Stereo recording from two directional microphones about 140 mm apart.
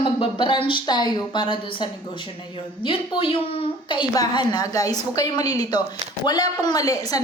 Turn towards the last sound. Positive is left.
turn(degrees=25)  # may be behind; listen again after turning